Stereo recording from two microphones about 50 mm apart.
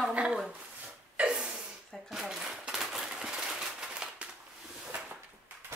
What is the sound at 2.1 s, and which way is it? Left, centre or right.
Typewriter, centre.